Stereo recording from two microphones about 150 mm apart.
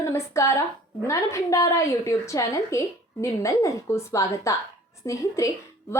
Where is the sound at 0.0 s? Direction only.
20° left (ahead or behind).